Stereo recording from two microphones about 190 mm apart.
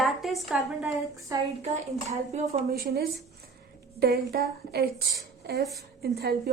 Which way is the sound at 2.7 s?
55° right (ahead or behind).